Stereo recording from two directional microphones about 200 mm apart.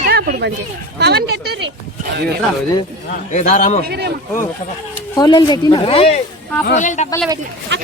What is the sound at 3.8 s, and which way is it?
Speech, 55° right (ahead or behind).